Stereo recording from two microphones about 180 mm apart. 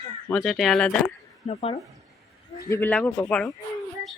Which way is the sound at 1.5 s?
35° left (ahead or behind).